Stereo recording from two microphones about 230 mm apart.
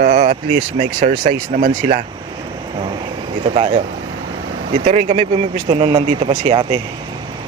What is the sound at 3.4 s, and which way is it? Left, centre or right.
Speech, right.